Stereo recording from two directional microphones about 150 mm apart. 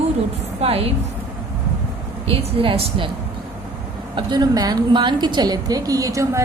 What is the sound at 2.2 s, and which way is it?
Speech, 40° right (ahead or behind).